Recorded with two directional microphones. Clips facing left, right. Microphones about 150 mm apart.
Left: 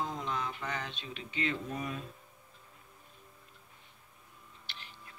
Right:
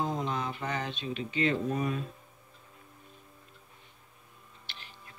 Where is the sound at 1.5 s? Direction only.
50° right (ahead or behind).